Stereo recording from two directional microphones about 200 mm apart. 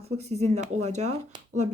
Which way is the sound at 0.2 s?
35° right (ahead or behind).